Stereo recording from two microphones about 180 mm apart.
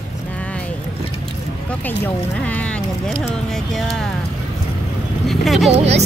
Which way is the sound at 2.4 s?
10° left (ahead or behind).